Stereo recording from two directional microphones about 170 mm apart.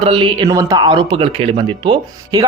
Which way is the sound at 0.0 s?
30° right (ahead or behind).